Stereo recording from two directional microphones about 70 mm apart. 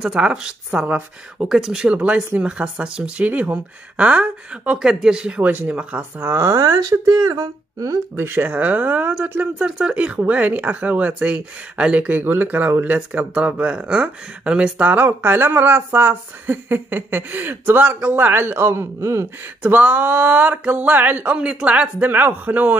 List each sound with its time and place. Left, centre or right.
0.0 s speech: centre
6.6 s speech: right
8.2 s speech: right
8.5 s speech: right
19.6 s speech: right